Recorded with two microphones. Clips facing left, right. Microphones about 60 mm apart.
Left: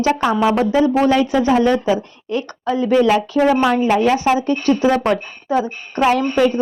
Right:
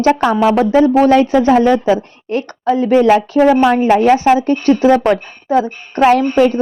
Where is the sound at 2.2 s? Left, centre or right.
Right.